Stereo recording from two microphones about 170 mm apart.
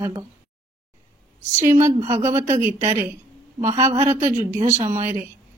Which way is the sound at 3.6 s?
20° right (ahead or behind).